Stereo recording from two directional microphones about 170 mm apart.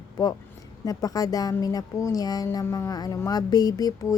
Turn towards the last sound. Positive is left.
turn(degrees=20)  # may be behind; listen again after turning